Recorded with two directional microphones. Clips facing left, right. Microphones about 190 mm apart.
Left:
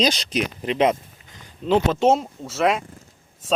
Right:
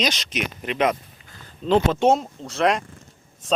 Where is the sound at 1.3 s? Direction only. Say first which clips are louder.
Even; 15° left (ahead or behind).